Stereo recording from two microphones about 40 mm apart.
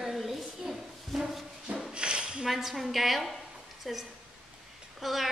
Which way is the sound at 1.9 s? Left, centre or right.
Right.